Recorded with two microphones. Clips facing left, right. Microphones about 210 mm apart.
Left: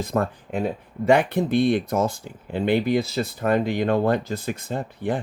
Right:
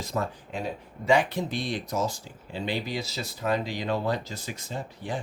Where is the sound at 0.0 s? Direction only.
55° left (ahead or behind).